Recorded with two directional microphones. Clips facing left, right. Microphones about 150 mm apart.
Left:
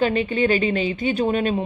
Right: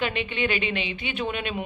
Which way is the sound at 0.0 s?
40° left (ahead or behind).